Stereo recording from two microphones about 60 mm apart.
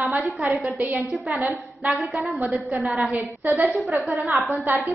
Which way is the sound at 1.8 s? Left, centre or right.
Right.